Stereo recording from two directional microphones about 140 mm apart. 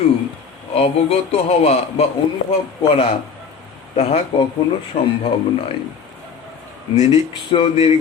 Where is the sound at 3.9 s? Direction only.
50° left (ahead or behind).